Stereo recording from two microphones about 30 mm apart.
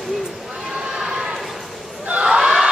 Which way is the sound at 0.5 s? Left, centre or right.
Centre.